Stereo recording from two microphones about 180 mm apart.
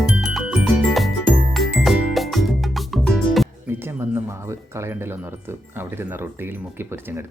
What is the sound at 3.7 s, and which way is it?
Speech, 10° right (ahead or behind).